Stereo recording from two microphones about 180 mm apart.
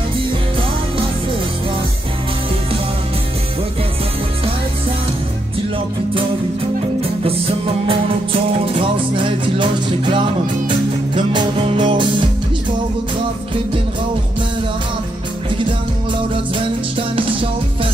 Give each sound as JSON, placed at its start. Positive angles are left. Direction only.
{"t": 7.0, "sound": "music", "side_deg": -30}
{"t": 16.5, "sound": "music", "side_deg": -30}